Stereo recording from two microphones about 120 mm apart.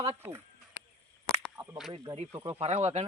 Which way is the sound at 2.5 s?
55° right (ahead or behind).